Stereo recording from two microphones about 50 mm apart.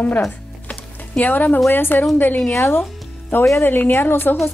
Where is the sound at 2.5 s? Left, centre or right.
Left.